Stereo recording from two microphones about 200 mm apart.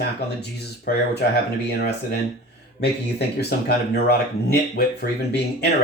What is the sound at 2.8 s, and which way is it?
Speech, 55° left (ahead or behind).